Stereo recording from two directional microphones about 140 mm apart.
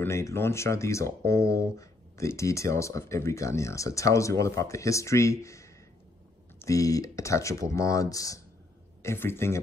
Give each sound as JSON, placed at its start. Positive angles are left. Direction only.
{"t": 0.0, "sound": "speech", "side_deg": 20}